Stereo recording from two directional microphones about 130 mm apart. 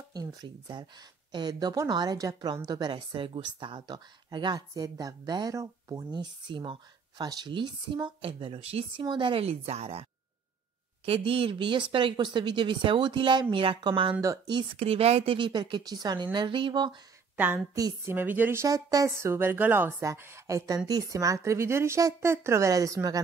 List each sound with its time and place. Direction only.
0.1 s speech: 30° right (ahead or behind); by 9.0 s 50° right (ahead or behind)
9.0 s a woman's voice: 35° right (ahead or behind); by 10.0 s 55° right (ahead or behind)
11.1 s speech: 45° right (ahead or behind)
14.8 s a woman's voice: 50° right (ahead or behind)
15.3 s speech: 35° right (ahead or behind)
18.1 s speech: 15° right (ahead or behind)